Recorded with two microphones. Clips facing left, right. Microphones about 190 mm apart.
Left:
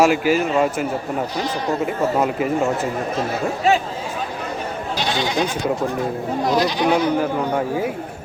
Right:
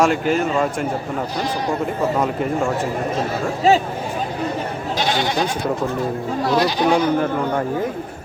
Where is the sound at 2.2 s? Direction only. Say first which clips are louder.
Left 1 dB; 5° left (ahead or behind).